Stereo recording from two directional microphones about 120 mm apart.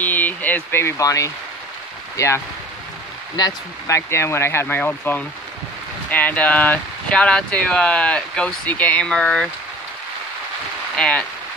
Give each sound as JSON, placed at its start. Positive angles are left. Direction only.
{"t": 0.0, "sound": "a sound", "side_deg": 15}
{"t": 2.1, "sound": "speech", "side_deg": 25}
{"t": 11.0, "sound": "speech", "side_deg": 10}